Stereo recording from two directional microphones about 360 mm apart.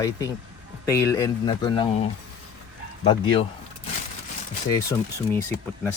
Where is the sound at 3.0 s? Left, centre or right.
Centre.